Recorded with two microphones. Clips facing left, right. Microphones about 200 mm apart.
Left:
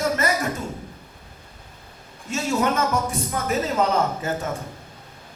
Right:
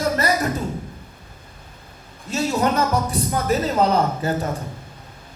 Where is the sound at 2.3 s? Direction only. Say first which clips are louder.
Right 2 dB; 35° right (ahead or behind).